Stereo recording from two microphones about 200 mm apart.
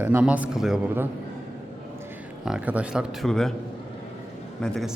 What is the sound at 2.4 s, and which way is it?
A man's voice, 5° right (ahead or behind).